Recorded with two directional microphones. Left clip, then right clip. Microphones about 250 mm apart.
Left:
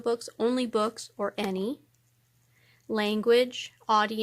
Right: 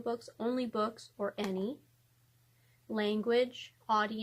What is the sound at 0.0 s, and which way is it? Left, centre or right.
Speech, left.